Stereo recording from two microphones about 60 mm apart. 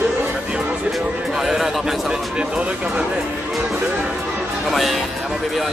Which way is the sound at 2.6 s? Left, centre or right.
Centre.